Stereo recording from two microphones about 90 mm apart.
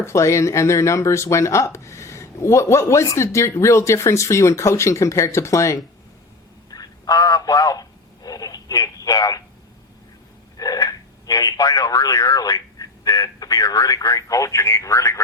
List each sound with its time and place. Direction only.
0.0 s speech: 30° left (ahead or behind)
6.7 s a sound: 45° left (ahead or behind)
10.6 s speech: 45° left (ahead or behind)